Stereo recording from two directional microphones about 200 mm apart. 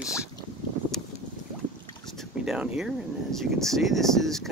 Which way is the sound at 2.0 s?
Centre (ahead or behind).